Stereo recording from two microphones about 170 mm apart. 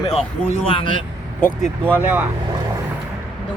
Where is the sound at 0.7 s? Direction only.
30° left (ahead or behind).